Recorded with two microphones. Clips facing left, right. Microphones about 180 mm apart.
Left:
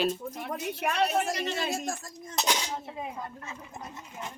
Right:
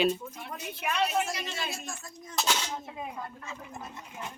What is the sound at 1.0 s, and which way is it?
Speech, 55° left (ahead or behind).